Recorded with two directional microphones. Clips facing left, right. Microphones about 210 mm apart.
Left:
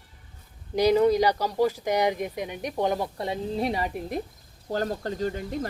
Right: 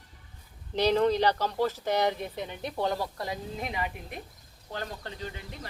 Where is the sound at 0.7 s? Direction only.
10° left (ahead or behind).